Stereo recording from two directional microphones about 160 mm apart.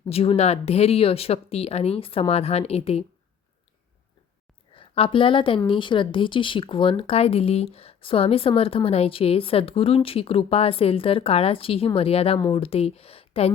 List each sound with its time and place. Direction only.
0.1 s speech: 40° left (ahead or behind)
4.7 s speech: 35° left (ahead or behind)